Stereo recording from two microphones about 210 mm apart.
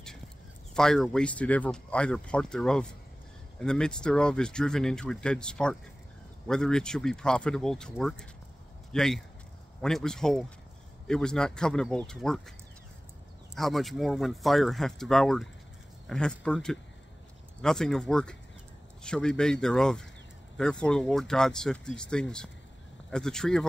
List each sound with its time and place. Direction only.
0.7 s speech: centre (ahead or behind)
13.6 s speech: centre (ahead or behind)